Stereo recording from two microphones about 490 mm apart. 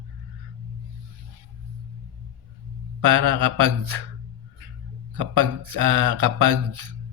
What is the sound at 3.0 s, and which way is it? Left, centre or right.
Speech, right.